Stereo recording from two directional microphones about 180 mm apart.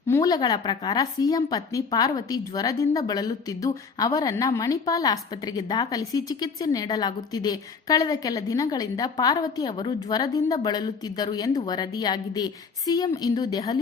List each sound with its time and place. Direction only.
0.1 s a woman's voice: 20° left (ahead or behind)